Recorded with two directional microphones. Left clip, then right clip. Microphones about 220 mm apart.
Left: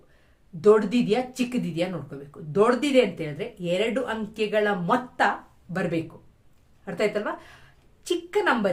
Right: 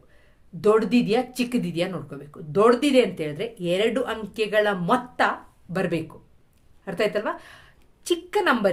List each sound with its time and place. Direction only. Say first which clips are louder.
0.6 s speech: left 1 dB; 40° right (ahead or behind)